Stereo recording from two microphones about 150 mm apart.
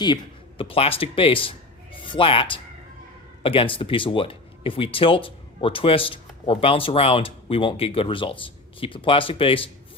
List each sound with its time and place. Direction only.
0.6 s speech: 40° left (ahead or behind)